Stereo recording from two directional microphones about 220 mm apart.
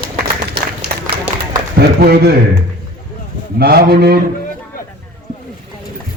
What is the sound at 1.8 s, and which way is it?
Speech, 45° right (ahead or behind).